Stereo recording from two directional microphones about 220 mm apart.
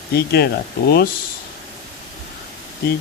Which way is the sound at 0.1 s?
45° left (ahead or behind).